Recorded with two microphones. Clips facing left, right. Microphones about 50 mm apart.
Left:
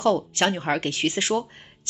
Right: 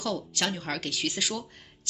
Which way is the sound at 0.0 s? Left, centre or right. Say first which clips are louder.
Left 9 dB; left.